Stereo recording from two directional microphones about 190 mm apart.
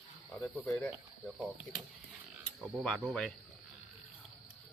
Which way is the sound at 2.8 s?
Centre (ahead or behind).